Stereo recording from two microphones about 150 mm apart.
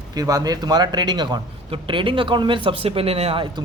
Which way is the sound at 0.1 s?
25° right (ahead or behind).